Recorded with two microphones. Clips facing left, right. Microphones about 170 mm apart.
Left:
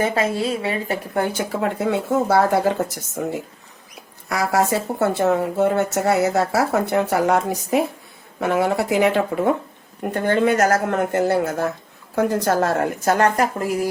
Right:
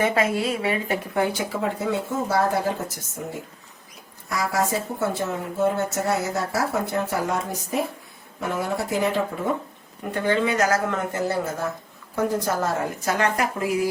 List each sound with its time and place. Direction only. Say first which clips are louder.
0.0 s speech: left 1 dB; 30° left (ahead or behind)
1.1 s speech: left 2 dB; 50° left (ahead or behind); by 2.7 s 70° left (ahead or behind)
3.2 s speech: left 8 dB; 90° left
4.3 s speech: left 5 dB; 70° left (ahead or behind)
10.2 s a woman's voice: left 4 dB; 50° left (ahead or behind)